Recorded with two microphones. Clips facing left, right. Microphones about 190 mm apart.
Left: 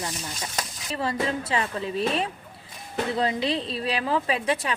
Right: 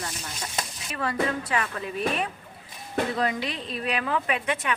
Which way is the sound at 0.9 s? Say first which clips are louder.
Left 1 dB; 30° left (ahead or behind).